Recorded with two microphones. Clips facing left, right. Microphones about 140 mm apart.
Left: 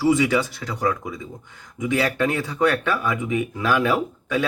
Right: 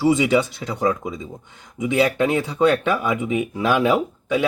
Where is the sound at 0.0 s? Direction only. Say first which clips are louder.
Right 2 dB; 20° right (ahead or behind).